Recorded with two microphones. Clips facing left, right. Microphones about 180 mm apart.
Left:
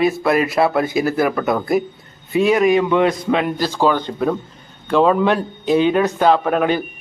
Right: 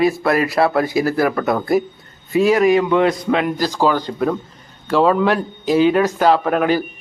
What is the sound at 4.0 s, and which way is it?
Speech, 25° left (ahead or behind).